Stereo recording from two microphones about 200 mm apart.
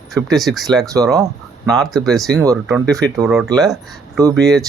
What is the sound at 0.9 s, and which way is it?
Speech, 15° right (ahead or behind).